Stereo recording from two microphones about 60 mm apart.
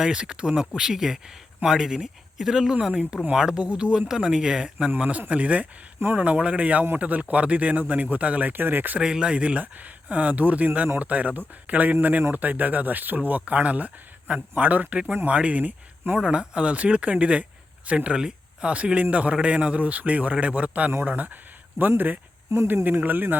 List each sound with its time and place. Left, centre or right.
0.0 s speech: centre
2.9 s speech: centre
4.9 s speech: right
9.0 s speech: centre
15.1 s speech: right
16.1 s speech: centre; by 23.4 s right